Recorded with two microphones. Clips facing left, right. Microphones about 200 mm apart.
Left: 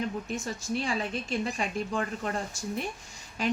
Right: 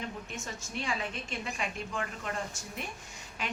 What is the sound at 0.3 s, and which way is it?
A woman's voice, 35° left (ahead or behind).